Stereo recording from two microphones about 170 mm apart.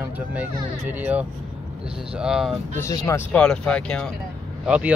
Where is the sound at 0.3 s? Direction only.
10° right (ahead or behind).